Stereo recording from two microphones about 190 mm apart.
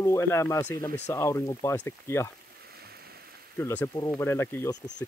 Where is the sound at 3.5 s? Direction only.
10° left (ahead or behind).